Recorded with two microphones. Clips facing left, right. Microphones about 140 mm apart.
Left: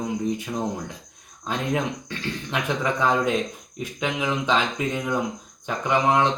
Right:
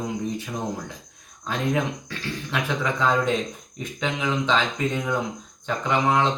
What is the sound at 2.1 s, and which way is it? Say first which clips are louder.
Speech: left 1 dB; 20° left (ahead or behind).